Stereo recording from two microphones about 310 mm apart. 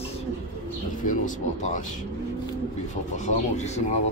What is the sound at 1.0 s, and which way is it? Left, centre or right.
Speech, left.